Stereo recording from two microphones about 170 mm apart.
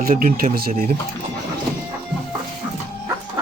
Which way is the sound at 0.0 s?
55° right (ahead or behind).